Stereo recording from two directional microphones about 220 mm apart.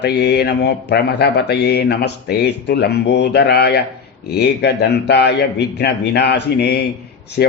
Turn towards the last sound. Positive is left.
turn(degrees=45)  # may be behind; listen again after turning